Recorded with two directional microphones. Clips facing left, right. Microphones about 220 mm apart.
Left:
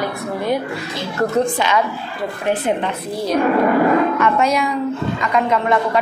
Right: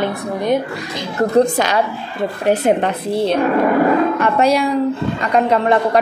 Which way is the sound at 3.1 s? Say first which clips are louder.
Right 1 dB; 25° right (ahead or behind).